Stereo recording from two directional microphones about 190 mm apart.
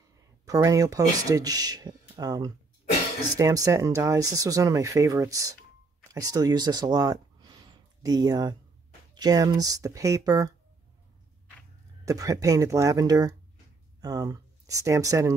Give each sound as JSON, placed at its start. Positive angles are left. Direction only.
{"t": 0.5, "sound": "speech", "side_deg": -20}
{"t": 12.0, "sound": "speech", "side_deg": -20}